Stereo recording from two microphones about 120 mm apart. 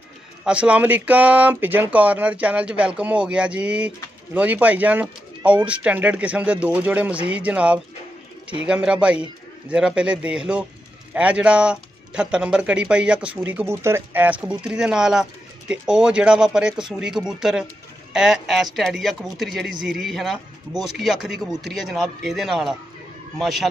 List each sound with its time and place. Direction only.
0.5 s speech: 10° right (ahead or behind)